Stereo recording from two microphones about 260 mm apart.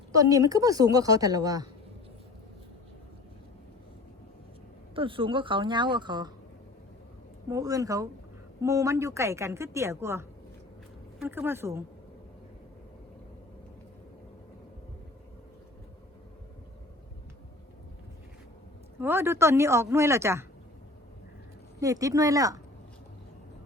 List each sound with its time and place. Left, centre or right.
0.1 s a woman's voice: centre
4.9 s a woman's voice: centre
7.5 s a woman's voice: centre
18.9 s a woman's voice: centre
21.8 s a woman's voice: centre